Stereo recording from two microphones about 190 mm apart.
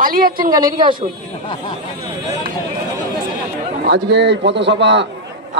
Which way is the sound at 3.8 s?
60° right (ahead or behind).